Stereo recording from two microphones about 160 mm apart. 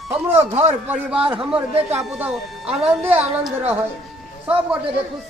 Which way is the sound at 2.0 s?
5° right (ahead or behind).